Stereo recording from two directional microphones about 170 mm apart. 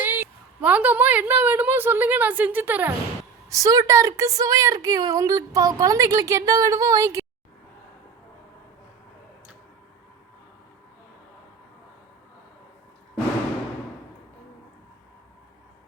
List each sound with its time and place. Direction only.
0.0 s a woman's voice: 10° right (ahead or behind)